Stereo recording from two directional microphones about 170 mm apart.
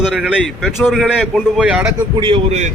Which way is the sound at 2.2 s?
30° right (ahead or behind).